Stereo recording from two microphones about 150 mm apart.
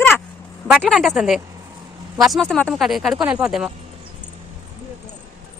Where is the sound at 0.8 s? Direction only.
Centre (ahead or behind).